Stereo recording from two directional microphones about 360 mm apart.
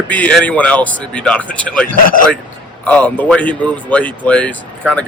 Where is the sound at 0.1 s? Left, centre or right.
Centre.